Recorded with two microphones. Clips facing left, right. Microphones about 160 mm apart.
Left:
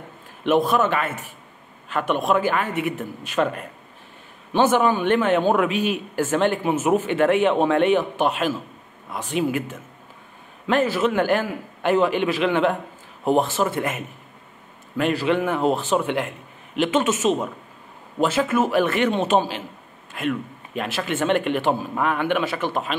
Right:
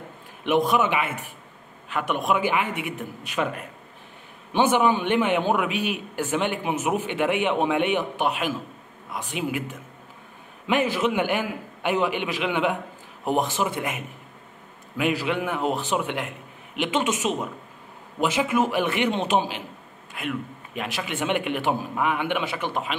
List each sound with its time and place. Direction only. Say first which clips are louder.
0.5 s a man's voice: left 2 dB; 15° right (ahead or behind)
2.7 s a man's voice: left 6 dB; 45° left (ahead or behind)
3.3 s a man's voice: left 5 dB; 10° right (ahead or behind)
15.0 s a man's voice: left 4 dB; 10° right (ahead or behind)